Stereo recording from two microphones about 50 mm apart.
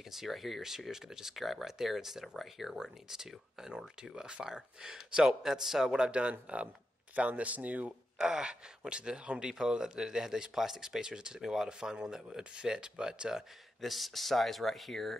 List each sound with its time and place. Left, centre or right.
0.1 s speech: centre; by 7.9 s right
8.2 s speech: centre
13.7 s speech: centre